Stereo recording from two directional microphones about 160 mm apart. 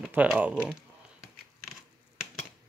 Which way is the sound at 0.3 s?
10° right (ahead or behind).